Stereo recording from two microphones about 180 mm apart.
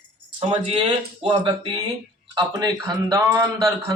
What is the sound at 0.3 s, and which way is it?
A man's voice, 30° right (ahead or behind).